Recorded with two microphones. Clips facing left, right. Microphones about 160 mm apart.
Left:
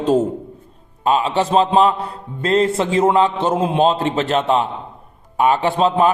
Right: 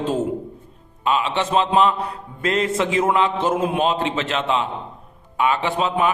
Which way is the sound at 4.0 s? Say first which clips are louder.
Left 5 dB; 40° left (ahead or behind).